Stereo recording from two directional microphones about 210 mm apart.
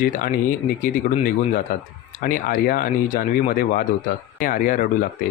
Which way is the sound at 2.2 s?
40° left (ahead or behind).